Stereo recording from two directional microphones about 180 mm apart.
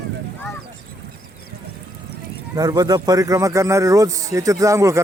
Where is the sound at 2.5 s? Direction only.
20° right (ahead or behind).